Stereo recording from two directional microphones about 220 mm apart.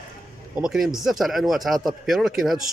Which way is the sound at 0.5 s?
Centre (ahead or behind).